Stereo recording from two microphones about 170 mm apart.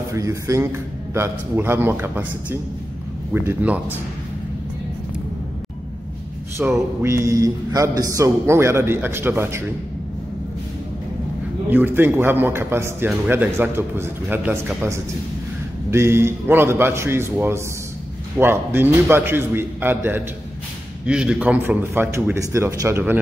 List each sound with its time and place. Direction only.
0.1 s a man's voice: 20° right (ahead or behind)
6.6 s a man's voice: 10° right (ahead or behind)
11.7 s a man's voice: 10° right (ahead or behind)